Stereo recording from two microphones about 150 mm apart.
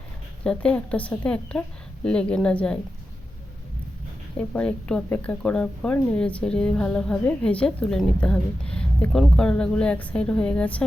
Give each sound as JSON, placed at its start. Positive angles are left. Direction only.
{"t": 0.4, "sound": "speech", "side_deg": 5}
{"t": 4.4, "sound": "speech", "side_deg": 5}